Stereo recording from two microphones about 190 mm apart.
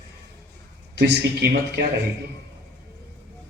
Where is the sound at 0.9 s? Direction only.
60° right (ahead or behind).